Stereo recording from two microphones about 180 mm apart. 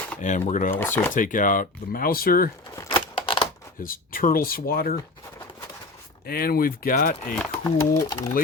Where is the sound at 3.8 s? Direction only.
50° left (ahead or behind).